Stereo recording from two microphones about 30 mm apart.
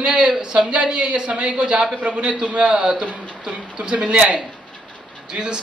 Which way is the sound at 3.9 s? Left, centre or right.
Right.